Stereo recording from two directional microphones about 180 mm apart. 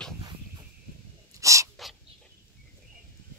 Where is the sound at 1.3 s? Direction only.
15° right (ahead or behind).